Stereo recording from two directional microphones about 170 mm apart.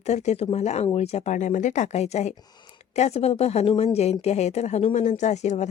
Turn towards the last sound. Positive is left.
turn(degrees=45)  # may be behind; listen again after turning